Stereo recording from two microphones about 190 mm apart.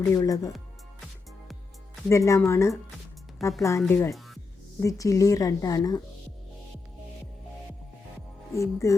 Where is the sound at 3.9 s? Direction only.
15° left (ahead or behind).